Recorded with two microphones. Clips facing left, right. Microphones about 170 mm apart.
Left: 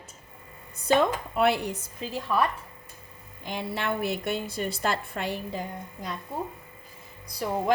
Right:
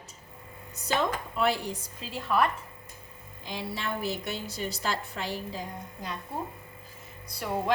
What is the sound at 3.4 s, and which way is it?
A woman's voice, 60° left (ahead or behind).